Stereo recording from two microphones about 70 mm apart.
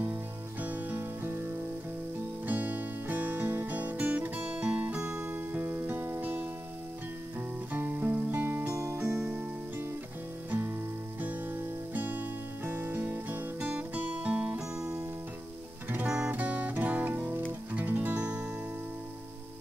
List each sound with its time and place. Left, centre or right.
0.6 s music: right
2.4 s music: right
5.9 s music: right
7.7 s music: right
9.2 s music: right
11.1 s music: right
16.1 s music: right